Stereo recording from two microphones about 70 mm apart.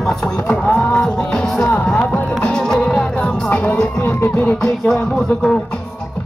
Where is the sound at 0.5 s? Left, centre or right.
Centre.